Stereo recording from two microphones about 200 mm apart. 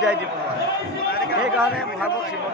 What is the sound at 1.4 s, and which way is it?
Speech, 5° right (ahead or behind).